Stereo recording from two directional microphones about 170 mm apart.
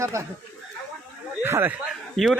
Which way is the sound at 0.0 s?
15° right (ahead or behind).